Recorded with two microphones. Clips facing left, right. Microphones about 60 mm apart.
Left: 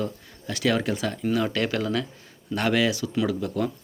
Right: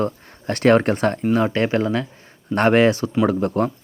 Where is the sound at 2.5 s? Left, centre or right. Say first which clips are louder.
Right 8 dB; right.